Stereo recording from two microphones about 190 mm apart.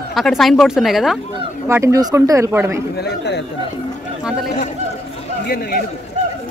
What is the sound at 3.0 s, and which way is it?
Speech, 60° left (ahead or behind).